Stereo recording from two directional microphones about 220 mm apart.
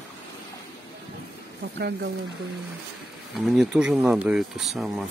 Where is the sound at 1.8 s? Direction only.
50° right (ahead or behind).